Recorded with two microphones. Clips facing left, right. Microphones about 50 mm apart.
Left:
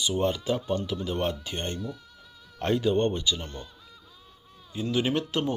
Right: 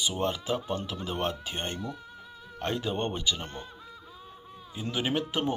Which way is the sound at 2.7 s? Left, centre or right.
Centre.